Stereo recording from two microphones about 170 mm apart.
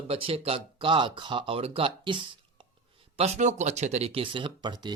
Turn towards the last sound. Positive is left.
turn(degrees=-25)  # may be behind; listen again after turning